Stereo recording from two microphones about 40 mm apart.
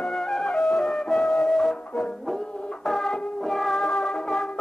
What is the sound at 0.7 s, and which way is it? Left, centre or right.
Music, centre.